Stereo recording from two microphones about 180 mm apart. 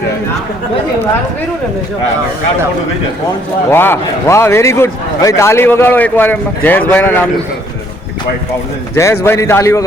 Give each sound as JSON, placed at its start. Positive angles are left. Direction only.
{"t": 3.7, "sound": "a man's voice", "side_deg": 15}
{"t": 9.2, "sound": "a man's voice", "side_deg": 15}